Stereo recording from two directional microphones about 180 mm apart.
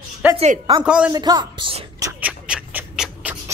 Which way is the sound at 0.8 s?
5° right (ahead or behind).